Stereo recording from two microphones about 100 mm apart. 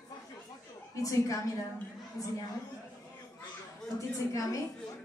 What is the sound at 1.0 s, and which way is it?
Speech, 35° left (ahead or behind).